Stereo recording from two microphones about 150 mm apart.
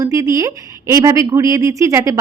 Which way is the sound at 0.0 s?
20° right (ahead or behind).